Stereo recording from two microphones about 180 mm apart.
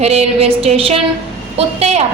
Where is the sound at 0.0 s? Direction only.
35° right (ahead or behind).